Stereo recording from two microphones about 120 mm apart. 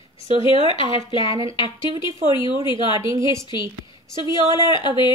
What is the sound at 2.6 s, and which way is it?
Speech, 40° left (ahead or behind).